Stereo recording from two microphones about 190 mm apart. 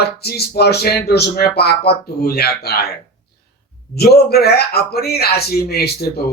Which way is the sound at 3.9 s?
55° left (ahead or behind).